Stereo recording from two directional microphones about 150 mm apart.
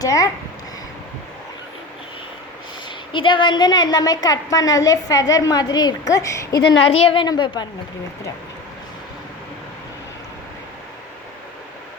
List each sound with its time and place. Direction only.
0.0 s a woman's voice: 25° left (ahead or behind)
3.1 s a woman's voice: 35° left (ahead or behind)
6.8 s a woman's voice: 40° left (ahead or behind)